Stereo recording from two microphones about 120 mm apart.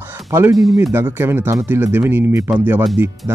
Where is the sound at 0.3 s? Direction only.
20° right (ahead or behind).